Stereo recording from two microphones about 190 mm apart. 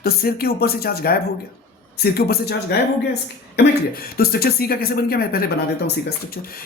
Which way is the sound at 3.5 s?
50° left (ahead or behind).